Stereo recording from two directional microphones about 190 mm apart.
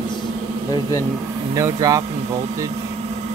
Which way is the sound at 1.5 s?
20° right (ahead or behind).